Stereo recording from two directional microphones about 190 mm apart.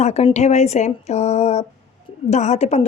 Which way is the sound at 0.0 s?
35° left (ahead or behind).